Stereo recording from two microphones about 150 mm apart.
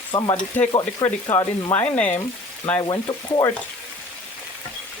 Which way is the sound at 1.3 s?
20° left (ahead or behind).